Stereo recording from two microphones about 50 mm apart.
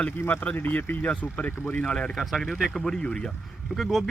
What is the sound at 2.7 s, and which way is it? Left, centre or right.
Speech, centre.